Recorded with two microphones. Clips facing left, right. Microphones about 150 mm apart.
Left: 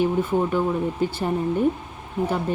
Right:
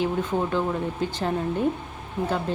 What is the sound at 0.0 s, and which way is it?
Speech, 10° left (ahead or behind).